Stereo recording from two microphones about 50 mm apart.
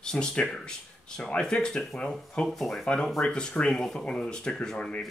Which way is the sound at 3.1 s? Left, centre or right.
Centre.